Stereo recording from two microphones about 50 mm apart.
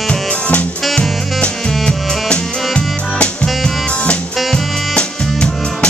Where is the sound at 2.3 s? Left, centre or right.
Centre.